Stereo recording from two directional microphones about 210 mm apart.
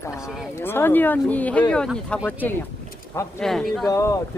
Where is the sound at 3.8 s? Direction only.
15° left (ahead or behind).